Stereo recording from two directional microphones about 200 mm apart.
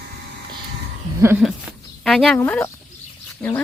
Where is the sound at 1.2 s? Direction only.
10° right (ahead or behind).